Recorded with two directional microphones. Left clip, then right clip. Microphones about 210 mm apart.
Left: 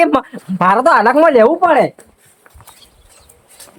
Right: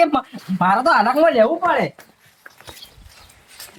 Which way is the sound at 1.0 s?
40° left (ahead or behind).